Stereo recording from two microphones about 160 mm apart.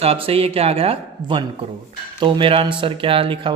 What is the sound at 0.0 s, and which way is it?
Speech, 40° right (ahead or behind).